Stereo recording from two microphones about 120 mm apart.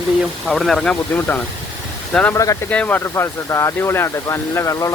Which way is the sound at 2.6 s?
15° left (ahead or behind).